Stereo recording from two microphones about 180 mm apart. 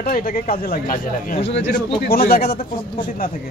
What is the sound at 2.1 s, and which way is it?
Speech, 60° left (ahead or behind).